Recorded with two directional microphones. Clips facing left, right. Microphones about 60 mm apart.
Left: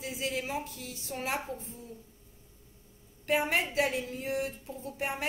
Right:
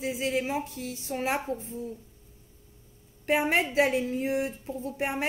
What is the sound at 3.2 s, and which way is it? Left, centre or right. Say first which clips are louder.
A woman's voice: right 4 dB; right.